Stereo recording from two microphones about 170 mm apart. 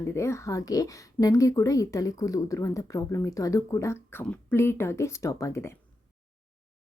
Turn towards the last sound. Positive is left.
turn(degrees=15)  # may be behind; listen again after turning